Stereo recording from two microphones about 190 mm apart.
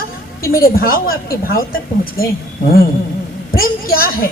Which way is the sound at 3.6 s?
50° left (ahead or behind).